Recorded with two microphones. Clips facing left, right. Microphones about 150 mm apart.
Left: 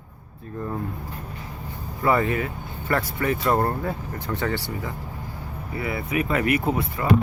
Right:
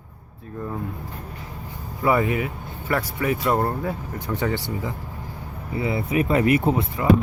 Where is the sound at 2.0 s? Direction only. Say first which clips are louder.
Right 1 dB; 10° right (ahead or behind); by 6.9 s 30° right (ahead or behind).